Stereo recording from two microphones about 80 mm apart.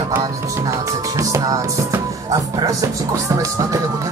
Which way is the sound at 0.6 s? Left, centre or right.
Right.